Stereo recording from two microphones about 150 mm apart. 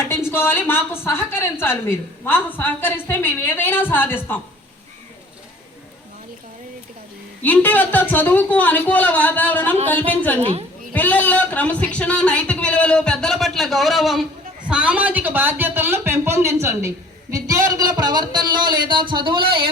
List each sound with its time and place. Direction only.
0.3 s a woman's voice: 15° left (ahead or behind)
7.4 s a woman's voice: 10° left (ahead or behind)
10.4 s a woman's voice: 40° right (ahead or behind)
10.9 s a woman's voice: 10° left (ahead or behind); by 19.7 s 35° right (ahead or behind)